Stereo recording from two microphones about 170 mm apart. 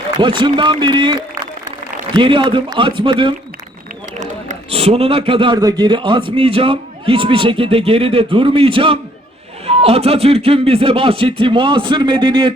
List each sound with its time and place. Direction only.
0.2 s a man's voice: 30° right (ahead or behind)
4.2 s a man's voice: 40° right (ahead or behind)